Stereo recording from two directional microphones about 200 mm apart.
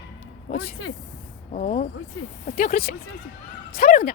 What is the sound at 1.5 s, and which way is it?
A woman's voice, 40° left (ahead or behind).